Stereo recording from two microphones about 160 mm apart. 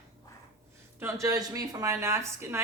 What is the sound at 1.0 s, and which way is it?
Speech, 20° right (ahead or behind).